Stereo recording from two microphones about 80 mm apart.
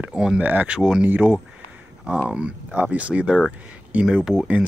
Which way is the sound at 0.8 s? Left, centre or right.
Centre.